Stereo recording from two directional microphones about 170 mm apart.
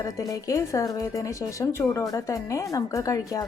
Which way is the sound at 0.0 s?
20° left (ahead or behind).